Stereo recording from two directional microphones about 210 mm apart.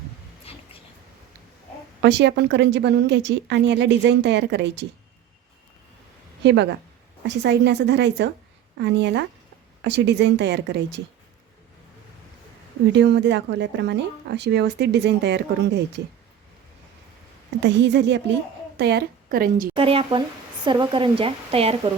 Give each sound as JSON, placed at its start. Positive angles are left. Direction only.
{"t": 0.5, "sound": "a sound", "side_deg": 30}
{"t": 2.0, "sound": "speech", "side_deg": -55}
{"t": 6.4, "sound": "a woman's voice", "side_deg": -55}
{"t": 12.9, "sound": "speech", "side_deg": -55}
{"t": 17.6, "sound": "a woman's voice", "side_deg": -55}
{"t": 19.7, "sound": "speech", "side_deg": -25}